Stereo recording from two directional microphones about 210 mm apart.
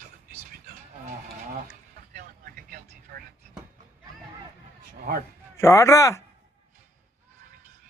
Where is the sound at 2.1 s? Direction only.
45° right (ahead or behind).